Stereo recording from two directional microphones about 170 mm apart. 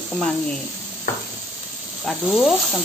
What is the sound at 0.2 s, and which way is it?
Sizzle, 5° left (ahead or behind).